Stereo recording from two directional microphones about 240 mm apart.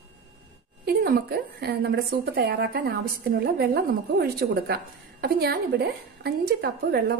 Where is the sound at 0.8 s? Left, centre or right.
Right.